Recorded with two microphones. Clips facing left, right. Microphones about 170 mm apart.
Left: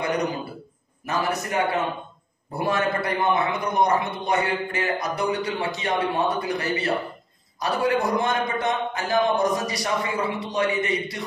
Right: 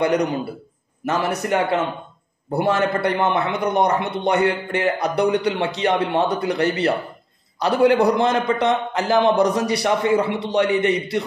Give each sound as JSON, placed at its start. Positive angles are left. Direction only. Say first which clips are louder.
{"t": 0.0, "sound": "a man's voice", "louder": "right 6 dB", "side_deg": -65}